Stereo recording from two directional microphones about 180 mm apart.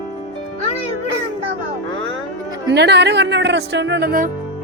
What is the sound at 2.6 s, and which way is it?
Speech, 70° right (ahead or behind).